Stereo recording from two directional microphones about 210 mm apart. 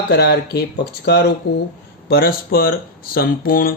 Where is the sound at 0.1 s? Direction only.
50° left (ahead or behind).